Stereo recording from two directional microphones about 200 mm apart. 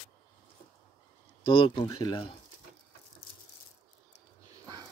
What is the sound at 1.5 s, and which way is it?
Speech, 25° left (ahead or behind).